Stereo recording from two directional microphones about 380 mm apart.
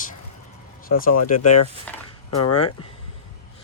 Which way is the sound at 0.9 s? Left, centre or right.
Left.